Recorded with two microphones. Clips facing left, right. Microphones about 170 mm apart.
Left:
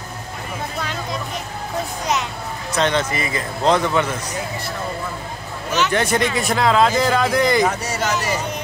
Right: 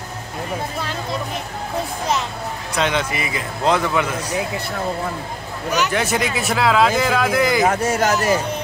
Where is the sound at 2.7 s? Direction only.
5° right (ahead or behind).